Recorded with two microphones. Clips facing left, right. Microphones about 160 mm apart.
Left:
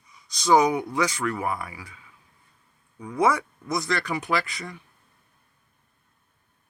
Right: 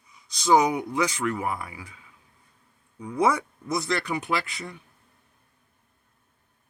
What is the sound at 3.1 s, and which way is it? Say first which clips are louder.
Speech: left 1 dB; 25° right (ahead or behind).